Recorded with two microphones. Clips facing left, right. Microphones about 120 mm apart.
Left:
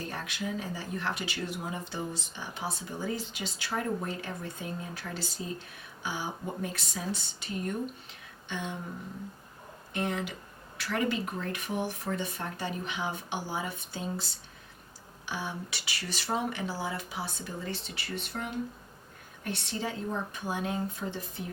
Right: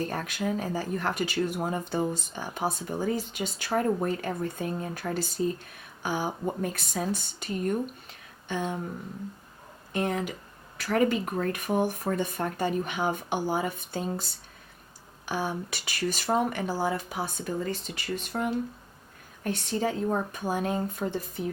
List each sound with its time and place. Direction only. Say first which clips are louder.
0.1 s speech: right 5 dB; 45° right (ahead or behind)
9.9 s speech: right 4 dB; 45° right (ahead or behind)
15.3 s speech: right 6 dB; 45° right (ahead or behind)
19.5 s speech: right 6 dB; 45° right (ahead or behind)